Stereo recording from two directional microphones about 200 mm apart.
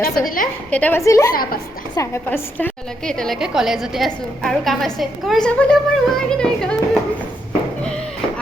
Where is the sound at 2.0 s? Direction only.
10° left (ahead or behind).